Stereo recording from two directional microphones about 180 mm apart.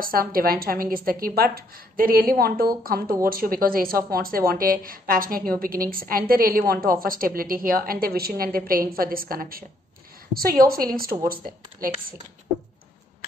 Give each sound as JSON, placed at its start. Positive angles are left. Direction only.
{"t": 0.0, "sound": "speech", "side_deg": -55}